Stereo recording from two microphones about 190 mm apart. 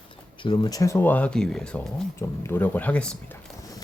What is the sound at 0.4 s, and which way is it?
Speech, 25° left (ahead or behind).